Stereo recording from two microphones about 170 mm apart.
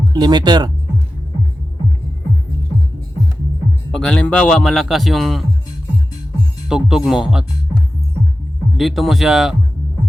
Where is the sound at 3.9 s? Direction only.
5° left (ahead or behind).